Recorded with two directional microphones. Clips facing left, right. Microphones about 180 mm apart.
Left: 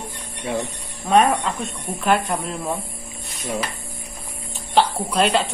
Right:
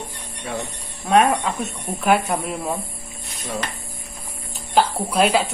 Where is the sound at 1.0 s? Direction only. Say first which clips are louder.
Even; 5° right (ahead or behind).